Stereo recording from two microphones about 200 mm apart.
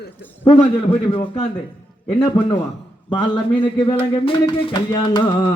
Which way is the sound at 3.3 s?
25° left (ahead or behind).